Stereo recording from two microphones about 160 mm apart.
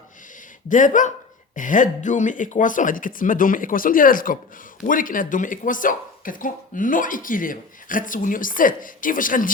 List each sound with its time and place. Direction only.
0.7 s speech: 55° left (ahead or behind)